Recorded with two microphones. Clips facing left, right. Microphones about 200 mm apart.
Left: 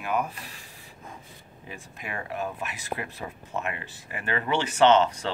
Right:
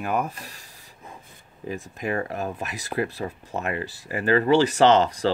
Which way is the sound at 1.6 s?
40° right (ahead or behind).